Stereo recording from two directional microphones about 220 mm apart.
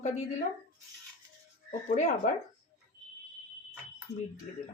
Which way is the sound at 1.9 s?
35° left (ahead or behind).